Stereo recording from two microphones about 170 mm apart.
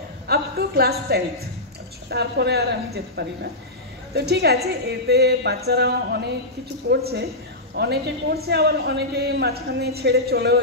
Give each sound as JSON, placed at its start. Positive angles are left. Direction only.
{"t": 0.3, "sound": "a woman's voice", "side_deg": -65}
{"t": 2.0, "sound": "a woman's voice", "side_deg": -75}
{"t": 6.9, "sound": "a woman's voice", "side_deg": -90}
{"t": 7.7, "sound": "a woman's voice", "side_deg": -70}